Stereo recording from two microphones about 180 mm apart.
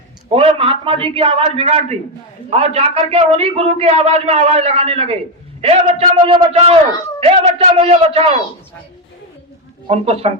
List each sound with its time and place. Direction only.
0.3 s a man's voice: 30° right (ahead or behind)
9.8 s a man's voice: 35° right (ahead or behind)